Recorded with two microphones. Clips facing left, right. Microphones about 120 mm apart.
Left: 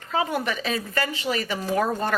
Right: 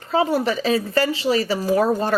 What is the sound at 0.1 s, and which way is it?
Speech, 35° right (ahead or behind).